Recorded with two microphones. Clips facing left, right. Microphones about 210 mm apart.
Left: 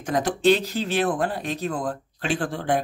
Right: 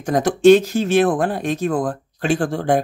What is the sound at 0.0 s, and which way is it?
Speech, 45° right (ahead or behind).